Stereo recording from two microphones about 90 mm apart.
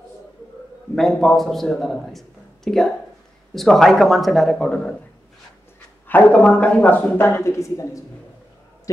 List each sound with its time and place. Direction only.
0.9 s a man's voice: 5° left (ahead or behind)
6.0 s a man's voice: 15° left (ahead or behind)
7.2 s speech: 30° left (ahead or behind)